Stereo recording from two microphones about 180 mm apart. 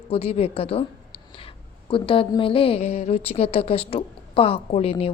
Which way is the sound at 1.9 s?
30° left (ahead or behind).